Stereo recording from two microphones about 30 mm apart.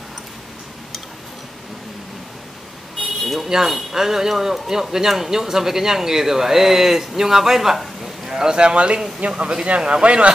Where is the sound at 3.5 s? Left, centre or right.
Centre.